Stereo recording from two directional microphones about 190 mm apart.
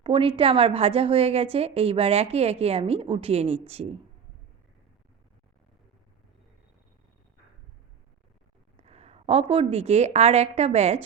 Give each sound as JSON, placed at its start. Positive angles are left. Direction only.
{"t": 0.0, "sound": "a woman's voice", "side_deg": -25}
{"t": 8.9, "sound": "a woman's voice", "side_deg": -35}